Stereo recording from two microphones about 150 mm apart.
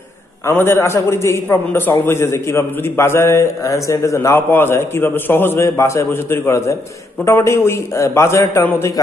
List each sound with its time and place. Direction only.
0.5 s a man's voice: 15° left (ahead or behind)